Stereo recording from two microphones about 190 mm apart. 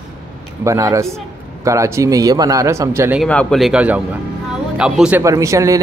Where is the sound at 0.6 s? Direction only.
15° right (ahead or behind).